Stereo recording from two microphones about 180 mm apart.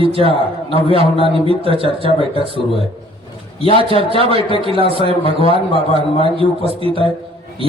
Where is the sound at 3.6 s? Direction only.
30° left (ahead or behind).